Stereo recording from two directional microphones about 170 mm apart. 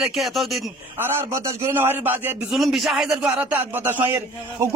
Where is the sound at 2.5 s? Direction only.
Centre (ahead or behind).